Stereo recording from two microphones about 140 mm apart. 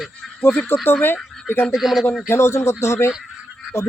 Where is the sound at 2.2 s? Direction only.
20° left (ahead or behind).